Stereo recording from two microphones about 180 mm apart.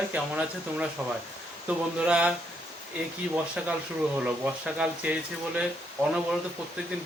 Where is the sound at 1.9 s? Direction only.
5° right (ahead or behind).